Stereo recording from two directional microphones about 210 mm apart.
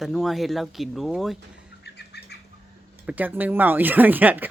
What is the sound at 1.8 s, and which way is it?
Bird, 50° left (ahead or behind).